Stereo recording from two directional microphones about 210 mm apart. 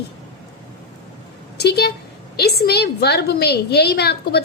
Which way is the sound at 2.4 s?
50° left (ahead or behind).